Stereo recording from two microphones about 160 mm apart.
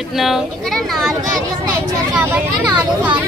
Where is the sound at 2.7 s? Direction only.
30° right (ahead or behind).